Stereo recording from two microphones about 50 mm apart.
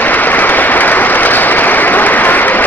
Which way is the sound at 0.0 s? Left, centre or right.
Left.